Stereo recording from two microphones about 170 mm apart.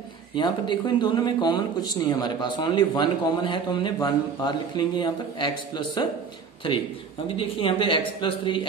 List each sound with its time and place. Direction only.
0.4 s speech: 25° left (ahead or behind)
7.2 s speech: 30° left (ahead or behind)